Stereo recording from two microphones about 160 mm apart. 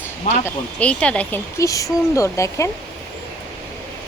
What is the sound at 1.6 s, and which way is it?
Speech, 20° left (ahead or behind).